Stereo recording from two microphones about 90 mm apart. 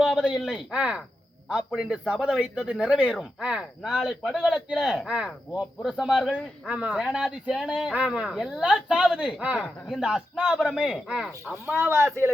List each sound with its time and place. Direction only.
0.0 s a man's voice: 5° right (ahead or behind)
8.3 s a man's voice: 5° right (ahead or behind)
11.8 s speech: 30° right (ahead or behind)